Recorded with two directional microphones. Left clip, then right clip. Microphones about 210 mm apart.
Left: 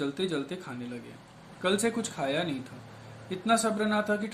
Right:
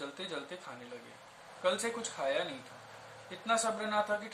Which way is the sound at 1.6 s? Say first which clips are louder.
Left 5 dB; 50° left (ahead or behind).